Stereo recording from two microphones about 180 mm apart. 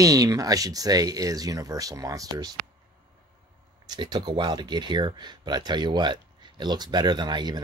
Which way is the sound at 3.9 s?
25° right (ahead or behind).